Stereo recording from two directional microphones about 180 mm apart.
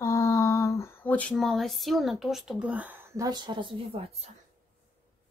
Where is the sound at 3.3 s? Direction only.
25° right (ahead or behind).